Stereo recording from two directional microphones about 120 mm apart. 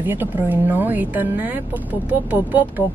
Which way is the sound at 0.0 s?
15° right (ahead or behind).